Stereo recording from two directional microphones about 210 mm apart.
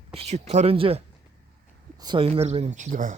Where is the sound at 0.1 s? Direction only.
30° right (ahead or behind).